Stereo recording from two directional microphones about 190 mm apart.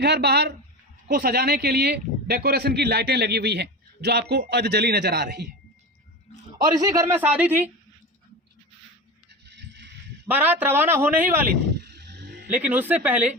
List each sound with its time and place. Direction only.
0.0 s speech: 60° right (ahead or behind)
6.7 s a man's voice: 20° right (ahead or behind)
9.5 s music: 65° right (ahead or behind)
10.2 s a man's voice: 10° right (ahead or behind)
11.7 s a sound: 65° right (ahead or behind)
12.5 s a man's voice: 10° right (ahead or behind)